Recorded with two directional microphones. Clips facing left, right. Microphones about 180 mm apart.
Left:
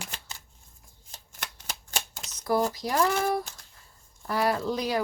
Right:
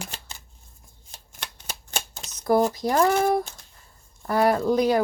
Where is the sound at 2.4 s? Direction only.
50° right (ahead or behind).